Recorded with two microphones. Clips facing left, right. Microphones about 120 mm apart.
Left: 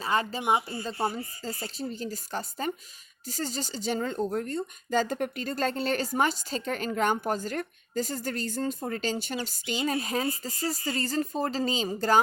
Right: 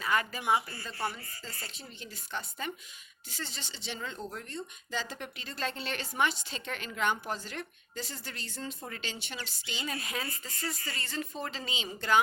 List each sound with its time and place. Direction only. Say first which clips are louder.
0.0 s speech: left 3 dB; 30° left (ahead or behind); by 9.9 s 45° left (ahead or behind)
9.9 s speech: left 9 dB; 30° left (ahead or behind)